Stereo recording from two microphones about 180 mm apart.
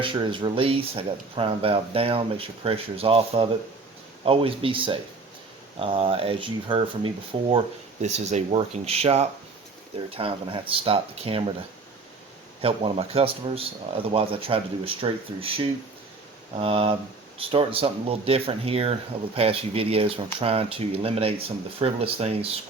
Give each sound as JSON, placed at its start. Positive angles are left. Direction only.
{"t": 0.0, "sound": "speech", "side_deg": -25}
{"t": 12.6, "sound": "speech", "side_deg": -30}